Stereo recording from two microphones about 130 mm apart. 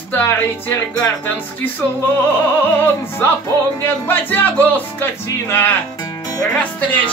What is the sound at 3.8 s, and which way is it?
Music, 15° left (ahead or behind).